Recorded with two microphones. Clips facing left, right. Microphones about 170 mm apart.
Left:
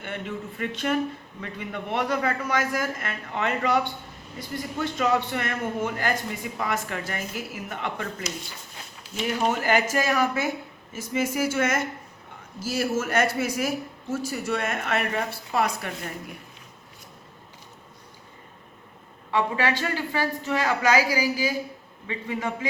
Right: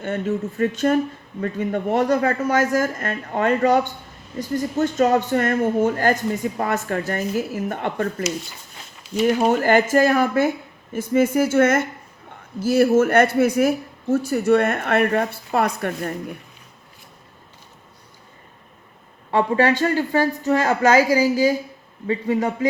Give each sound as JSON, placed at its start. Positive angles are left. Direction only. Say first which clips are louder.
{"t": 0.0, "sound": "speech", "louder": "right 9 dB", "side_deg": -40}
{"t": 9.2, "sound": "speech", "louder": "right 7 dB", "side_deg": -45}
{"t": 19.3, "sound": "a man's voice", "louder": "right 7 dB", "side_deg": -45}